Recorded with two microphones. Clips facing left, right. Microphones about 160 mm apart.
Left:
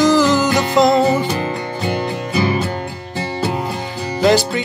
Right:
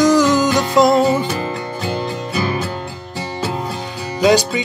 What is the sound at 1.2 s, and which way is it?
Music, 15° left (ahead or behind).